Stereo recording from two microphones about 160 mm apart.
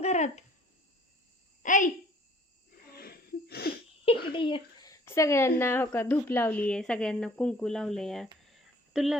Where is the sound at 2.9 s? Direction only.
70° left (ahead or behind).